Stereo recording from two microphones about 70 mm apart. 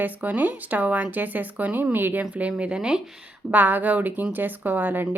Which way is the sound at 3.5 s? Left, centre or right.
Right.